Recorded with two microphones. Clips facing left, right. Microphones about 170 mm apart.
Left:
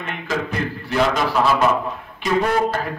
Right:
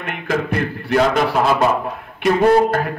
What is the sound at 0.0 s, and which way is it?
A man's voice, 60° right (ahead or behind).